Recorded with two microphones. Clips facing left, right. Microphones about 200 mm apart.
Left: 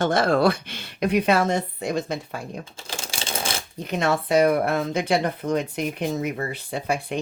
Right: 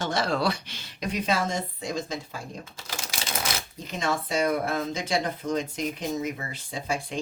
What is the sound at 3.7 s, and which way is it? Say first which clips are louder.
Speech: left 7 dB; 65° left (ahead or behind).